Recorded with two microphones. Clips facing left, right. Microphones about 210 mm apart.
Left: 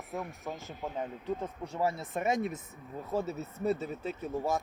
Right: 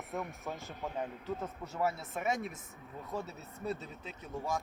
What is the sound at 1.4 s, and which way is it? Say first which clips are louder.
Speech: left 1 dB; 20° left (ahead or behind).